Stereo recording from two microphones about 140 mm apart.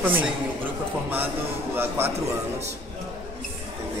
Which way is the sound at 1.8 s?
15° right (ahead or behind).